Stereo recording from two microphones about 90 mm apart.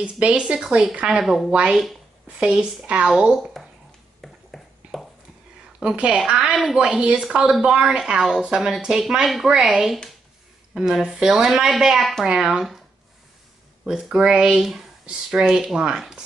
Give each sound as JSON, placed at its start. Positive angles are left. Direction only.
{"t": 0.0, "sound": "a woman's voice", "side_deg": -10}
{"t": 3.6, "sound": "a sound", "side_deg": 5}
{"t": 5.8, "sound": "a woman's voice", "side_deg": -10}
{"t": 13.8, "sound": "a woman's voice", "side_deg": -5}